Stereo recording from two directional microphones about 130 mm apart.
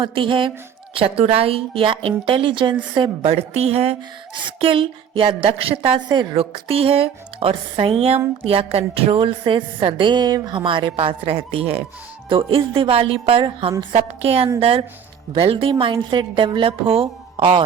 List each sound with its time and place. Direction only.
0.0 s a woman's voice: 40° right (ahead or behind)
4.4 s a woman's voice: 40° right (ahead or behind)